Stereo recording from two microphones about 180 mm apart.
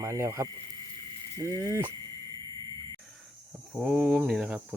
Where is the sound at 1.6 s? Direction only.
15° right (ahead or behind).